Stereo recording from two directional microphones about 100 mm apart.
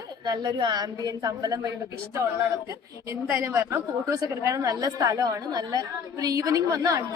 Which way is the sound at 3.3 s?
25° right (ahead or behind).